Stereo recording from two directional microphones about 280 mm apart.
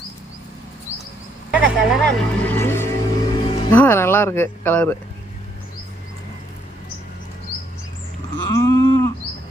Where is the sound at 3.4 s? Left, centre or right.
Centre.